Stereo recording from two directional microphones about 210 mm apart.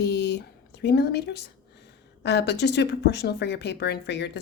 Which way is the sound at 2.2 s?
50° left (ahead or behind).